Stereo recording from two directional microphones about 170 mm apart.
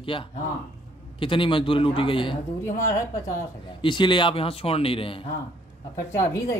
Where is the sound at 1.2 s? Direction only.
30° left (ahead or behind).